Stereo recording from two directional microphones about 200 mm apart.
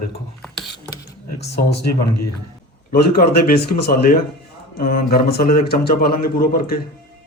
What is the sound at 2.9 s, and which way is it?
A man's voice, 50° left (ahead or behind).